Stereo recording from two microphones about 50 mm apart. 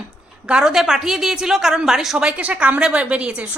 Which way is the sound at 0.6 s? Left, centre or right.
Centre.